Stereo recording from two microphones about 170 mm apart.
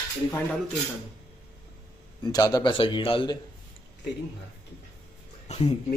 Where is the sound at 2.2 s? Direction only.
20° left (ahead or behind).